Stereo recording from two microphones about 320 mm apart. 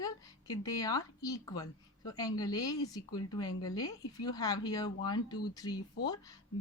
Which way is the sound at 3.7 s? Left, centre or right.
Centre.